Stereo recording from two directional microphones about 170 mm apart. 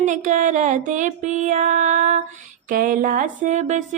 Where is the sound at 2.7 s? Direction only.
55° right (ahead or behind).